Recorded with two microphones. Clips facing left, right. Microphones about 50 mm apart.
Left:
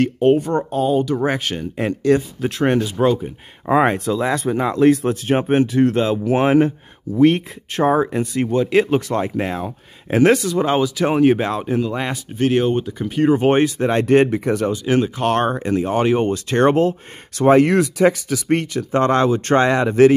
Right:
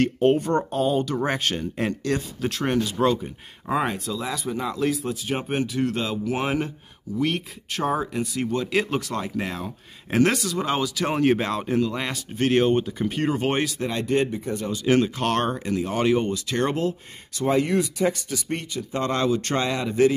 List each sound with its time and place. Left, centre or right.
0.0 s speech: centre
3.8 s speech: left
5.5 s speech: left; by 12.2 s centre
12.4 s speech: centre
13.3 s speech: centre
13.8 s speech: left
14.3 s speech: left
14.7 s speech: centre
16.3 s speech: left
17.4 s speech: left
17.6 s speech: left
19.0 s speech: left